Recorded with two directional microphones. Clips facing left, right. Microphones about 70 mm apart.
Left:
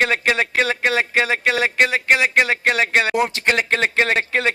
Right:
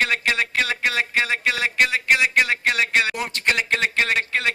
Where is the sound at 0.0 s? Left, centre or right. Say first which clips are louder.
Left 3 dB; left.